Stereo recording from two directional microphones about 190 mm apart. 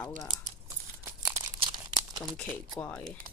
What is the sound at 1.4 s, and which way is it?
Crumpling, 25° right (ahead or behind).